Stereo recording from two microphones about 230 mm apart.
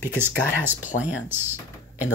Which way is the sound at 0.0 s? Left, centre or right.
Centre.